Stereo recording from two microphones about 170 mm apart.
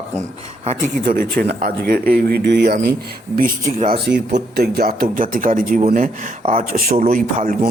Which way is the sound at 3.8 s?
70° right (ahead or behind).